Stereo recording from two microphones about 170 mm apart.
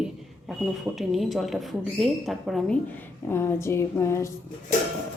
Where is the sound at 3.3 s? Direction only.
15° left (ahead or behind).